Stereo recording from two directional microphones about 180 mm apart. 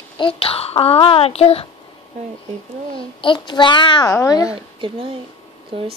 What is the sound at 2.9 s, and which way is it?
A child's voice, 25° left (ahead or behind).